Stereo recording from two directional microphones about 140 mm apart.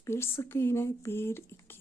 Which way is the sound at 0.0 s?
15° left (ahead or behind).